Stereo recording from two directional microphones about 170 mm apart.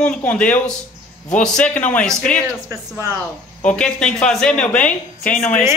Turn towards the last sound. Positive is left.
turn(degrees=5)  # may be behind; listen again after turning